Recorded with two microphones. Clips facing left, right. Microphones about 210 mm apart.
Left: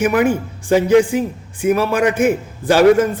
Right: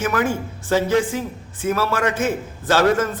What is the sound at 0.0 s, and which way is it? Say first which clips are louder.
A man's voice: left 6 dB; 15° left (ahead or behind).